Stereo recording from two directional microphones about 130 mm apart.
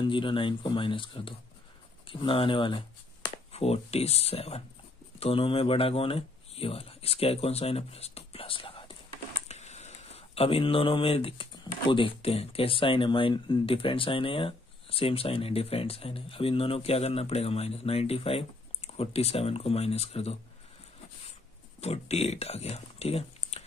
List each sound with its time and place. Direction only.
0.0 s speech: 40° left (ahead or behind)
3.5 s speech: 50° left (ahead or behind)
9.5 s a sound: 60° left (ahead or behind)
11.9 s speech: 45° left (ahead or behind)
21.8 s speech: 55° left (ahead or behind)